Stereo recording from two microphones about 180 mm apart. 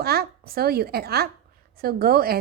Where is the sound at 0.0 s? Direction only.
60° right (ahead or behind).